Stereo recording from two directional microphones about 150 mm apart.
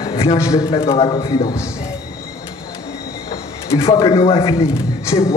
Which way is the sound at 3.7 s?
35° left (ahead or behind).